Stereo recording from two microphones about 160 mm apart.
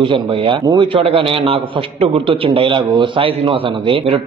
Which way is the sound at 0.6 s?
25° right (ahead or behind).